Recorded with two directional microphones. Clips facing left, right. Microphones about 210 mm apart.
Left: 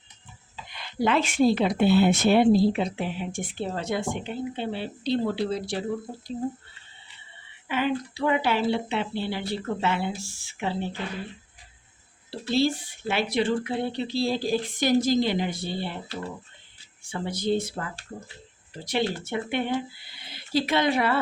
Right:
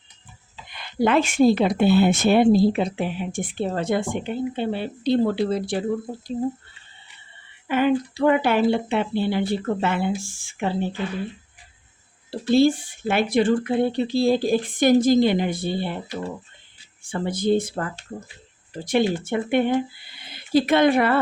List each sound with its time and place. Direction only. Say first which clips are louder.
0.8 s speech: right 4 dB; 50° right (ahead or behind)
7.7 s speech: right 6 dB; 50° right (ahead or behind)
12.3 s speech: right 7 dB; 50° right (ahead or behind)
17.0 s speech: right 5 dB; 50° right (ahead or behind)